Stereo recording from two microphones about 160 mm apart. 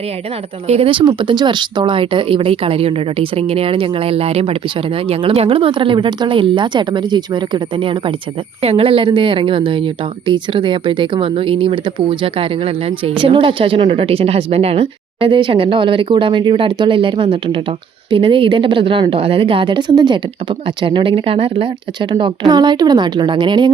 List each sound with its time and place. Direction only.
0.7 s a woman's voice: 35° right (ahead or behind)